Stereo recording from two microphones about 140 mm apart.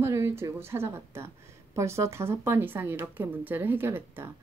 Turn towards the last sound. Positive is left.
turn(degrees=-15)  # may be behind; listen again after turning